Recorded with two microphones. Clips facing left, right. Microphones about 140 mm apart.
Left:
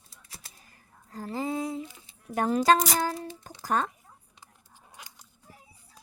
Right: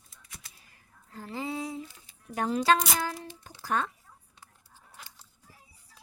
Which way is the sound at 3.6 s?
40° left (ahead or behind).